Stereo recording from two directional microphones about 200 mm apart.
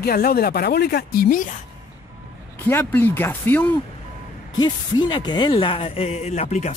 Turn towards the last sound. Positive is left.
turn(degrees=35)  # may be behind; listen again after turning